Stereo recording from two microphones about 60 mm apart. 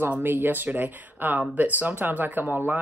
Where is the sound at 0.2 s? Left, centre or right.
Right.